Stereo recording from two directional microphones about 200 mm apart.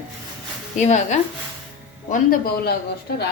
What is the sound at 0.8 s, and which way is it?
A woman's voice, 35° left (ahead or behind).